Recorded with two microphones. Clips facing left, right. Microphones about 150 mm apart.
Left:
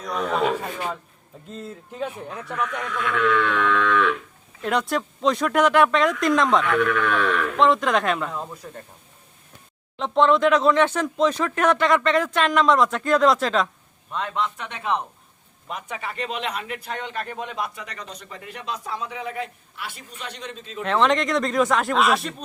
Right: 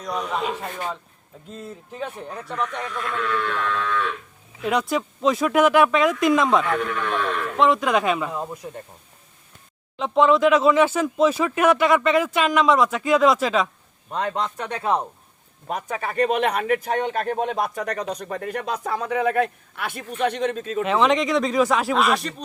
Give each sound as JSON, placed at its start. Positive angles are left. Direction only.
{"t": 2.3, "sound": "speech", "side_deg": 0}
{"t": 3.2, "sound": "livestock", "side_deg": 90}
{"t": 4.6, "sound": "speech", "side_deg": 0}
{"t": 6.7, "sound": "livestock", "side_deg": 90}
{"t": 7.6, "sound": "speech", "side_deg": 0}
{"t": 10.0, "sound": "speech", "side_deg": 0}
{"t": 14.1, "sound": "a man's voice", "side_deg": -35}
{"t": 20.8, "sound": "speech", "side_deg": -5}